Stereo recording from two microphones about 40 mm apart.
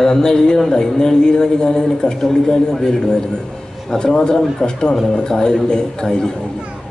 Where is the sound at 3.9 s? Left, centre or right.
Centre.